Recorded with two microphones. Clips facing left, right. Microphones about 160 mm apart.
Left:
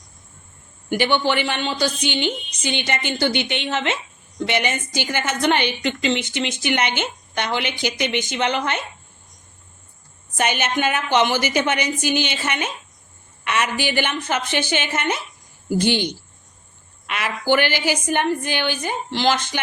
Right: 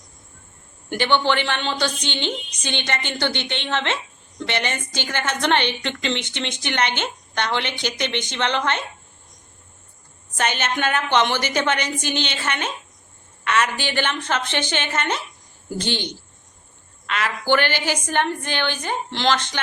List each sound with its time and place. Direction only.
0.9 s a woman's voice: 10° left (ahead or behind)
10.3 s a woman's voice: 10° left (ahead or behind)